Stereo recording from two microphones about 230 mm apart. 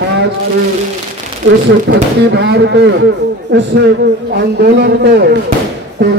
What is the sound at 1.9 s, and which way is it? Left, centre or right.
Speech, right.